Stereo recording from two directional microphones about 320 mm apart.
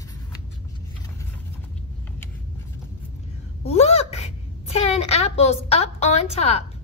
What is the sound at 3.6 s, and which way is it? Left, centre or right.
A woman's voice, centre.